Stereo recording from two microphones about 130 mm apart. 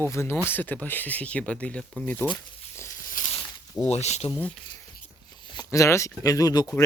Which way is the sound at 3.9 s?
55° left (ahead or behind).